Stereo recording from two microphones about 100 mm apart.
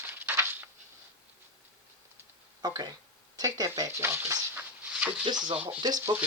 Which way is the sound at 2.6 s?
45° right (ahead or behind).